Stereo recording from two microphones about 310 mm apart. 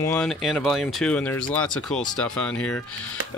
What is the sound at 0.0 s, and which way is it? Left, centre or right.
Speech, centre.